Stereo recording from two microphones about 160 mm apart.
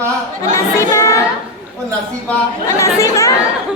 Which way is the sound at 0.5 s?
15° left (ahead or behind).